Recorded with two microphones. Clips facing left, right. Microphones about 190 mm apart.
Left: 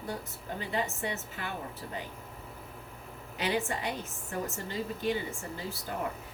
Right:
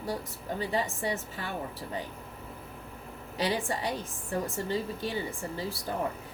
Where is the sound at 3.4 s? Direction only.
35° right (ahead or behind).